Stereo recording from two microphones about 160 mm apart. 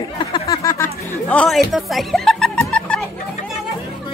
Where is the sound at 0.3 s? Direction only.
20° left (ahead or behind).